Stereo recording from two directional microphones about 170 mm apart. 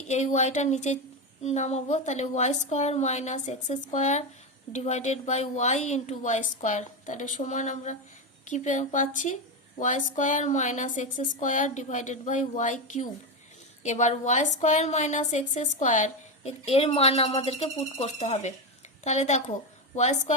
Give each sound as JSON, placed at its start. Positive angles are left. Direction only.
{"t": 0.1, "sound": "a woman's voice", "side_deg": 45}